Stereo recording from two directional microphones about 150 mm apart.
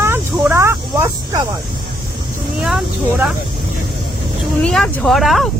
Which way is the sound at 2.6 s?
5° right (ahead or behind).